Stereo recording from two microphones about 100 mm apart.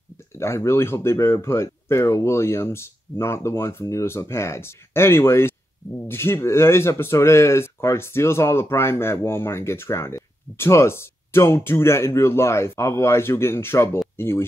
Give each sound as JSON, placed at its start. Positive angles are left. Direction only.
{"t": 0.4, "sound": "speech", "side_deg": 25}